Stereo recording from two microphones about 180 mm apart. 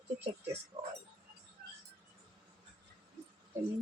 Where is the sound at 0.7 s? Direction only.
30° right (ahead or behind).